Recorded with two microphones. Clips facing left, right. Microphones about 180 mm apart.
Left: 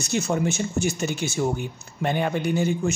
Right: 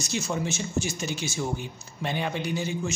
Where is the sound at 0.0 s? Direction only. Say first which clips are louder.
Left 5 dB; 60° left (ahead or behind).